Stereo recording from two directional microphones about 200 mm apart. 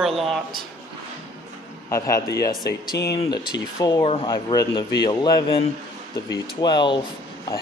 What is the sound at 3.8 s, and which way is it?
Speech, 25° left (ahead or behind).